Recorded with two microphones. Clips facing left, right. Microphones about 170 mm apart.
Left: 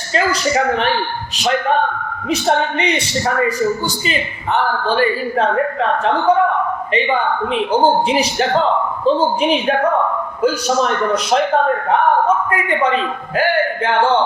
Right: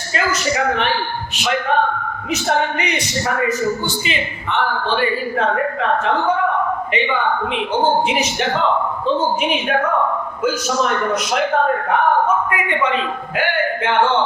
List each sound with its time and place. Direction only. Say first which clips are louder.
0.1 s speech: left 3 dB; 35° left (ahead or behind)
2.3 s speech: left 2 dB; 30° left (ahead or behind)
4.9 s speech: left 3 dB; 40° left (ahead or behind)
7.5 s speech: left 5 dB; 35° left (ahead or behind)